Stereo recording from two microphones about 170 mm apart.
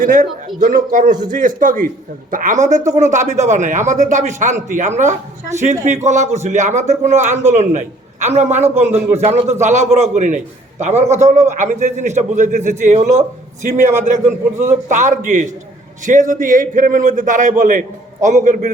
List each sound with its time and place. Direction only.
0.0 s a man's voice: 50° right (ahead or behind)
5.5 s a man's voice: 45° right (ahead or behind)